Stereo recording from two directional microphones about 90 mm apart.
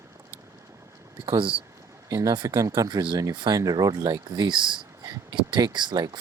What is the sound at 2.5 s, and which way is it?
Speech, 35° right (ahead or behind).